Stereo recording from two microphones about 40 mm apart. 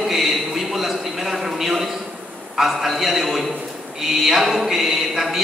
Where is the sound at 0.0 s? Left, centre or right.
Centre.